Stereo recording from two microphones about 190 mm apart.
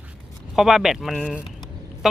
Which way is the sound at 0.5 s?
Centre (ahead or behind).